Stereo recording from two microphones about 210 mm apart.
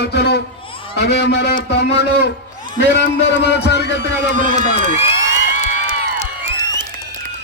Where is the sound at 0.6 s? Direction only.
25° left (ahead or behind).